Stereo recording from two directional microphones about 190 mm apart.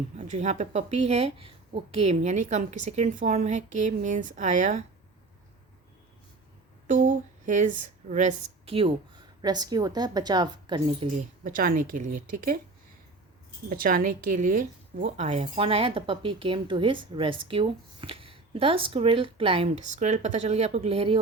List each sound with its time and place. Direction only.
0.2 s speech: 35° right (ahead or behind)
6.8 s speech: 45° right (ahead or behind); by 11.1 s 25° right (ahead or behind)
11.4 s speech: 45° right (ahead or behind)
13.7 s speech: 50° right (ahead or behind); by 21.2 s 30° right (ahead or behind)